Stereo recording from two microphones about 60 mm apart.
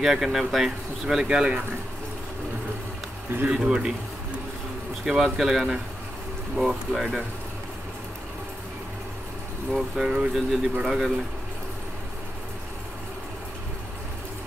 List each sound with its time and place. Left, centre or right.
0.0 s speech: centre
3.4 s speech: centre
5.0 s speech: centre
9.7 s speech: centre
10.0 s speech: centre
10.3 s speech: centre